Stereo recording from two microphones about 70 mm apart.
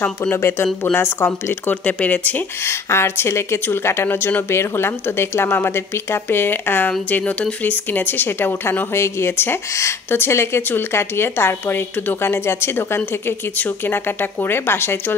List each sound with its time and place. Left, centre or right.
0.0 s speech: left
0.4 s speech: left
2.6 s speech: left